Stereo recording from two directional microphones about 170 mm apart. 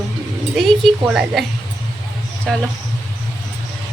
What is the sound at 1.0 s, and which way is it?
Speech, 5° right (ahead or behind).